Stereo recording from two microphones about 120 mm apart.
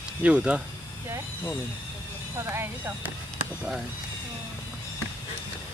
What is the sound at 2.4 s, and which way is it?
Speech, 20° right (ahead or behind).